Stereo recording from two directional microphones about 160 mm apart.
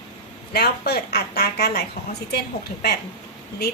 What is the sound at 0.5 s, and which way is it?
A woman's voice, 80° left.